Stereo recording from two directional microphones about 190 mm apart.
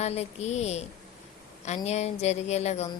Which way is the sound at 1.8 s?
35° left (ahead or behind).